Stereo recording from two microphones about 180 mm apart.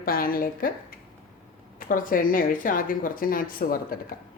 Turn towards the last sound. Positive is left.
turn(degrees=50)  # may be behind; listen again after turning